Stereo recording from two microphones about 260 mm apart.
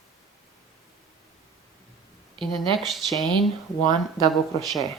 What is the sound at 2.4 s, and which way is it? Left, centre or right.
Speech, centre.